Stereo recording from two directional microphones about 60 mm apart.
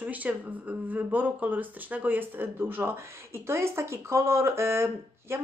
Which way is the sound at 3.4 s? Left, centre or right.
Right.